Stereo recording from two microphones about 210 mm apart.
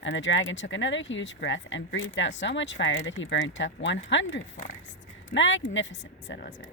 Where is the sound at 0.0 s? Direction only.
60° left (ahead or behind).